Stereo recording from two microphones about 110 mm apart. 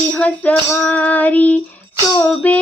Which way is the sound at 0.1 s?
10° left (ahead or behind).